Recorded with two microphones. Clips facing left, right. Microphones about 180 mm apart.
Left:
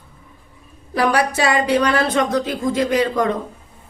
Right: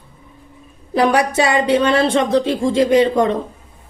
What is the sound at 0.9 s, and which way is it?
A woman's voice, 20° right (ahead or behind).